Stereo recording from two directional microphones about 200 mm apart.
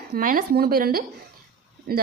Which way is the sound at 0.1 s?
45° right (ahead or behind).